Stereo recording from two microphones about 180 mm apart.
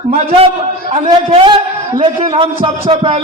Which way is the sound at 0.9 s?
35° right (ahead or behind).